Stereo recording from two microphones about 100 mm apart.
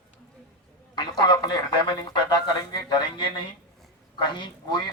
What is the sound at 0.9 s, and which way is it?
A man's voice, 45° left (ahead or behind).